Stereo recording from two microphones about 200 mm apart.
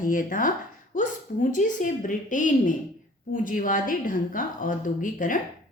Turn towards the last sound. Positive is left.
turn(degrees=40)  # may be behind; listen again after turning